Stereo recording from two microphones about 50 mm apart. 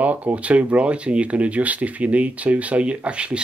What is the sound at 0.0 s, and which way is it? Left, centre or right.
Speech, right.